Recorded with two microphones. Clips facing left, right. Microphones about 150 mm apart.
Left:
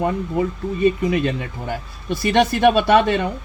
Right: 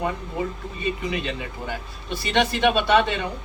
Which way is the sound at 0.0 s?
50° left (ahead or behind).